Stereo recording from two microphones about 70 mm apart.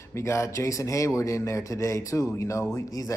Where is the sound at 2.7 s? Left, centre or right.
Left.